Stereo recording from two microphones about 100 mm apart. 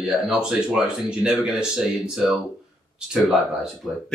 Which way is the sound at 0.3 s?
5° right (ahead or behind).